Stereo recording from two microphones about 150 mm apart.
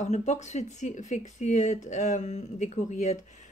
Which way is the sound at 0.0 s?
50° left (ahead or behind).